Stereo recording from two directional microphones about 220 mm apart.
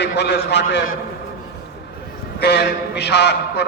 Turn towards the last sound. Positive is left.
turn(degrees=50)  # may be behind; listen again after turning